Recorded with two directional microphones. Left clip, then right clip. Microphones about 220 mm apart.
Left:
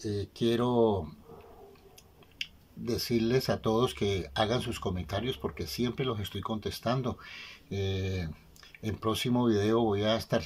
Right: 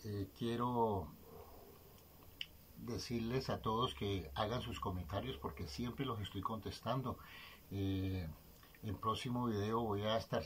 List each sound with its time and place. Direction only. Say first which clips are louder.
0.0 s speech: left 13 dB; 55° left (ahead or behind)
2.3 s speech: left 10 dB; 55° left (ahead or behind)